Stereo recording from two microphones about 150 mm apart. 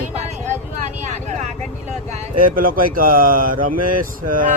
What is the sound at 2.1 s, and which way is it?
Mantra, 65° right (ahead or behind).